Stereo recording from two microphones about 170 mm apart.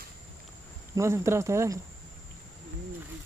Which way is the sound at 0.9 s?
15° right (ahead or behind).